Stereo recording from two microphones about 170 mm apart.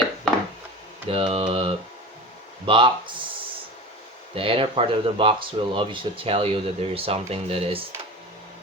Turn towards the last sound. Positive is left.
turn(degrees=-35)  # may be behind; listen again after turning